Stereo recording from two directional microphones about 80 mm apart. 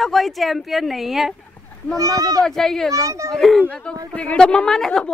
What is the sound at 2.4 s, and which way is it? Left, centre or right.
Speech, centre.